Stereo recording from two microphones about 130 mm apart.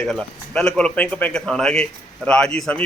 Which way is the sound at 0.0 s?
5° left (ahead or behind).